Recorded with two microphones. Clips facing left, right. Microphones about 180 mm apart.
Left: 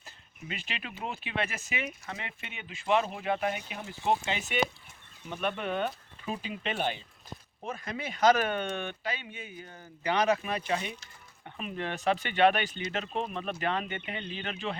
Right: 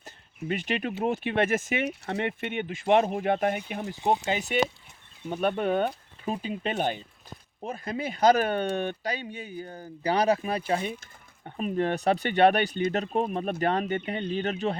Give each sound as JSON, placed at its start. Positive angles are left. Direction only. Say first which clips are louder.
{"t": 0.0, "sound": "a sound", "louder": "right 9 dB", "side_deg": -45}
{"t": 1.0, "sound": "speech", "louder": "right 8 dB", "side_deg": -50}
{"t": 1.9, "sound": "speech", "louder": "right 11 dB", "side_deg": -65}
{"t": 4.3, "sound": "speech", "louder": "right 5 dB", "side_deg": -40}
{"t": 7.6, "sound": "speech", "louder": "right 5 dB", "side_deg": -30}
{"t": 10.8, "sound": "speech", "louder": "right 6 dB", "side_deg": -50}